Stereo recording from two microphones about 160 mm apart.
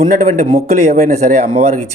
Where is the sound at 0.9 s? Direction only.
50° right (ahead or behind).